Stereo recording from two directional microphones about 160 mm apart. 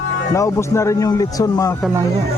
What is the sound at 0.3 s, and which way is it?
A man's voice, 20° left (ahead or behind).